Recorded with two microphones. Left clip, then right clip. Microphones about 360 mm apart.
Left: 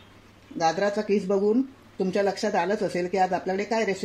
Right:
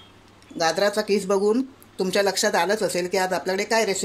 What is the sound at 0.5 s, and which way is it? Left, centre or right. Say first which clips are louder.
Speech: right 3 dB; right.